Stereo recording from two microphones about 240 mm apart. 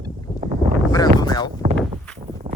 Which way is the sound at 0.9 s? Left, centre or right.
Centre.